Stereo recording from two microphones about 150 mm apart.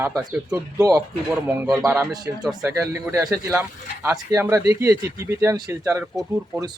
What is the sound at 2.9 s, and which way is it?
Speech, 15° right (ahead or behind).